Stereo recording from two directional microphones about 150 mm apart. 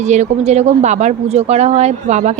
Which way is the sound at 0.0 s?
50° right (ahead or behind).